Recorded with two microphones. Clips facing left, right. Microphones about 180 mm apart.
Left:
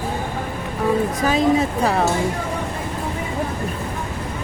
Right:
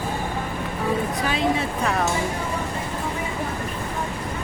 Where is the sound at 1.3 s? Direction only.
40° left (ahead or behind).